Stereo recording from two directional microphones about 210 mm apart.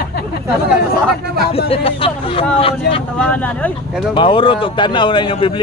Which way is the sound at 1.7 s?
25° left (ahead or behind).